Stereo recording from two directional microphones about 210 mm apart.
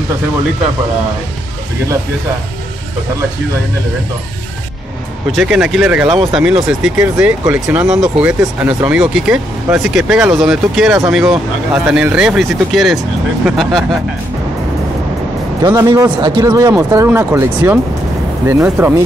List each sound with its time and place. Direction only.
5.3 s speech: 5° right (ahead or behind)
15.6 s speech: 15° right (ahead or behind)